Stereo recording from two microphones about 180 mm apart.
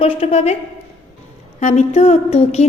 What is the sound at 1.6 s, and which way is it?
A woman's voice, 35° left (ahead or behind).